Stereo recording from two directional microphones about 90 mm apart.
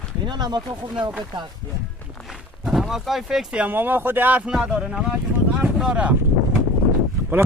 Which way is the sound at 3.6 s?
20° right (ahead or behind).